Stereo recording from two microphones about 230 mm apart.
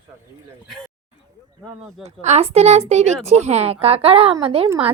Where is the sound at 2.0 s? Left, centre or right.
Right.